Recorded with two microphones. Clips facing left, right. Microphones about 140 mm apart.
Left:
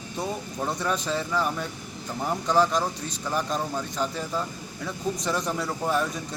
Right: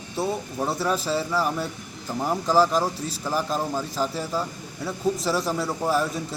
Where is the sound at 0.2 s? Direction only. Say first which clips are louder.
Right 4 dB; 5° right (ahead or behind).